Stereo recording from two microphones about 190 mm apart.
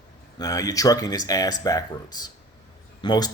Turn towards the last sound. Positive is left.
turn(degrees=20)  # may be behind; listen again after turning